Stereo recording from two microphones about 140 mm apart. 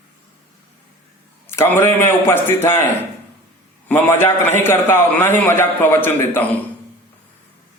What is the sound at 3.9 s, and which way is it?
A man's voice, 15° left (ahead or behind).